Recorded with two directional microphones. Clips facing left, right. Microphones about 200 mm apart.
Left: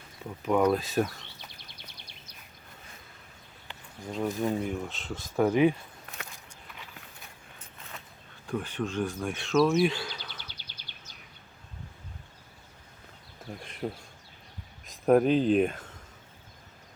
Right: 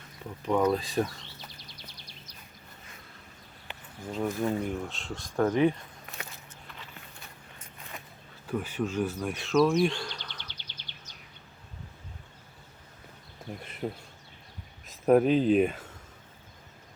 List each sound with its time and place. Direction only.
0.4 s speech: 5° left (ahead or behind)
4.1 s speech: centre (ahead or behind)
8.4 s speech: 5° right (ahead or behind); by 11.1 s 10° left (ahead or behind)
13.5 s speech: 5° right (ahead or behind)